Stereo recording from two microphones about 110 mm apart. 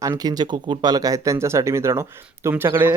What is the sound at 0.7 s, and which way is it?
Speech, 40° right (ahead or behind).